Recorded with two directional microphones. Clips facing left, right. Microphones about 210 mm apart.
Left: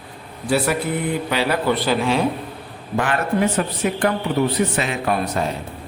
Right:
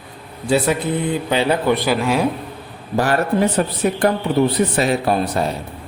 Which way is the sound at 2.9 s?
35° right (ahead or behind).